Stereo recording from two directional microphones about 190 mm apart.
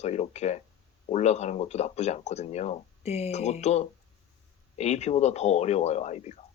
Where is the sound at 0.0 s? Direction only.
35° left (ahead or behind).